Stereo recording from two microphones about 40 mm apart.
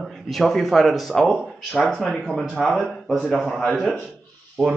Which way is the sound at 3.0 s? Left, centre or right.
Centre.